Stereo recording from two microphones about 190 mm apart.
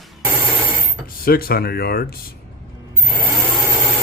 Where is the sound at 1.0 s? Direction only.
50° left (ahead or behind).